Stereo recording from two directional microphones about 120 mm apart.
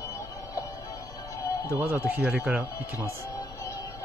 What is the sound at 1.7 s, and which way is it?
Speech, 20° right (ahead or behind).